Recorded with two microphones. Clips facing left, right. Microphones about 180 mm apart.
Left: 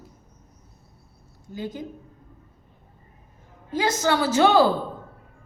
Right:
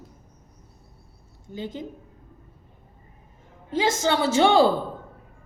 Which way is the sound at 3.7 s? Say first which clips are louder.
Even; 20° right (ahead or behind).